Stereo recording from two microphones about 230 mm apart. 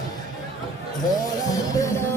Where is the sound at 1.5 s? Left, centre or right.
Centre.